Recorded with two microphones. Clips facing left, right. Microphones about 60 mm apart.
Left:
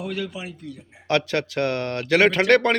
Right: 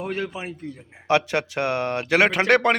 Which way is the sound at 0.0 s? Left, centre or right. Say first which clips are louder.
Right 1 dB; right.